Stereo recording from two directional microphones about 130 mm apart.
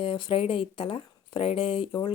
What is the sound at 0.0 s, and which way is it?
Speech, 40° left (ahead or behind).